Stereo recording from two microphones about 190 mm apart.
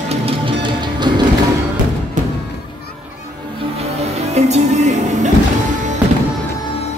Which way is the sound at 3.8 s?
35° right (ahead or behind).